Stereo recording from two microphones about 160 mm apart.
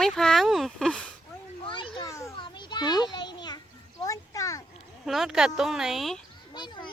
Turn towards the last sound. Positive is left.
turn(degrees=30)  # may be behind; listen again after turning